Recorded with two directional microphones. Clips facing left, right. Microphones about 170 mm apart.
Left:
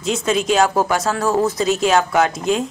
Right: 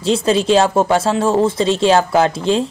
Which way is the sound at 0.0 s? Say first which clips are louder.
Right 4 dB; 30° right (ahead or behind).